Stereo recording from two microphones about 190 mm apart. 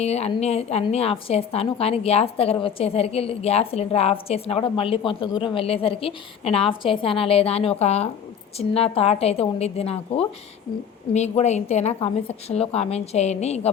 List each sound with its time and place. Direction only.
0.0 s a woman's voice: 35° left (ahead or behind)